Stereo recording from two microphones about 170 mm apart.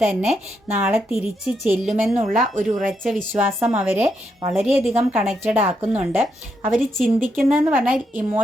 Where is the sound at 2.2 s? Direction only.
50° right (ahead or behind).